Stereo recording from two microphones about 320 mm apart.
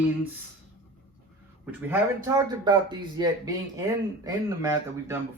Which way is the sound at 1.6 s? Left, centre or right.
Centre.